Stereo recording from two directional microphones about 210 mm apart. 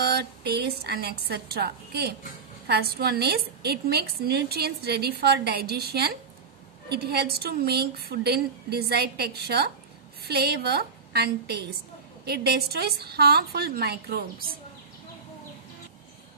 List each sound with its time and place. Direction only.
0.0 s a woman's voice: 50° right (ahead or behind)